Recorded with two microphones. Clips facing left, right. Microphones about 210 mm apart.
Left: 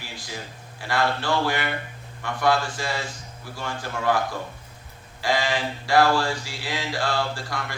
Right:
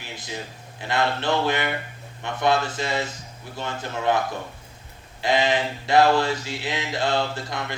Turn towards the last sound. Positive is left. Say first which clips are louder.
# right 1 dB
turn(degrees=-20)  # may be behind; listen again after turning